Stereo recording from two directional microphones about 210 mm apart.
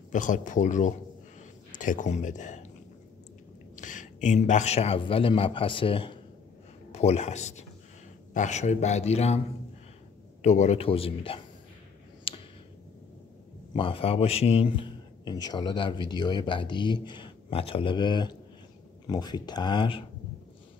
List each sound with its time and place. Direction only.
0.1 s a man's voice: 40° left (ahead or behind)
3.7 s a man's voice: 35° left (ahead or behind)
10.4 s speech: 35° left (ahead or behind)
12.3 s a sound: 25° left (ahead or behind)
13.7 s speech: 25° left (ahead or behind)